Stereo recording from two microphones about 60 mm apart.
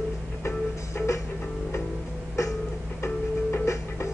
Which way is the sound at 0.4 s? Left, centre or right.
Left.